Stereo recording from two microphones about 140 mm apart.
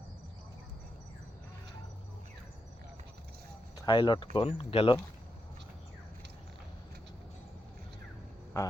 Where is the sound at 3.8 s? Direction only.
35° left (ahead or behind).